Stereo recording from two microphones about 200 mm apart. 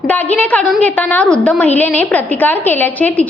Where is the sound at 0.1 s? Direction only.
10° left (ahead or behind).